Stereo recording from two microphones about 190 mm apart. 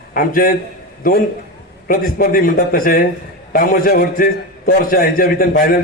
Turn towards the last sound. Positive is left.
turn(degrees=50)  # may be behind; listen again after turning